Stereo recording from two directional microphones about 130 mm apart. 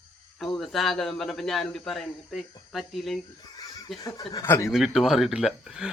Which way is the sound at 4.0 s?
25° left (ahead or behind).